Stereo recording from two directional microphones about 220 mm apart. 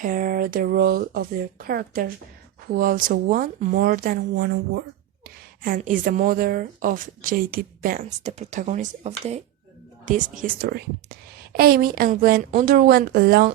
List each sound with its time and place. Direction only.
0.0 s a woman's voice: 40° right (ahead or behind)